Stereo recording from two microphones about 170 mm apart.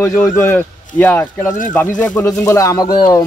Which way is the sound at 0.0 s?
15° left (ahead or behind).